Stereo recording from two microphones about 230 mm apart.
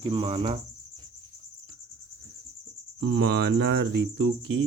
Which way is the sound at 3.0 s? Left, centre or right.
Right.